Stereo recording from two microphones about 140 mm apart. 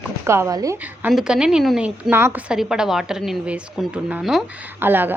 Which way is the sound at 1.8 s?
10° right (ahead or behind).